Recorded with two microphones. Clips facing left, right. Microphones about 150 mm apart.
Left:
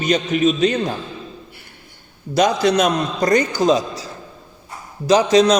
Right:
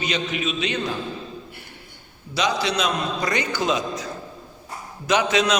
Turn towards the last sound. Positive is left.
turn(degrees=35)  # may be behind; listen again after turning